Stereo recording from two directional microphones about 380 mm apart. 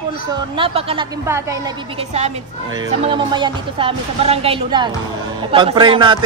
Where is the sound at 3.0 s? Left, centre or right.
Centre.